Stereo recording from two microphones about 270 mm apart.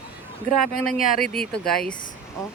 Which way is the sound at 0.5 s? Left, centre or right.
Centre.